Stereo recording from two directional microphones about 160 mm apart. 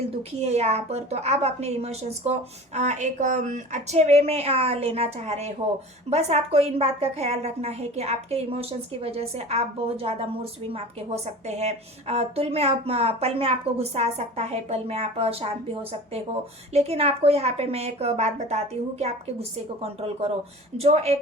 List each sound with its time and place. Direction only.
0.2 s a woman's voice: 40° right (ahead or behind)